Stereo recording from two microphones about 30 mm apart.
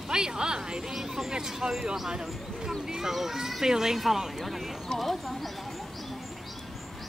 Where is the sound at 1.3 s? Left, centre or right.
Right.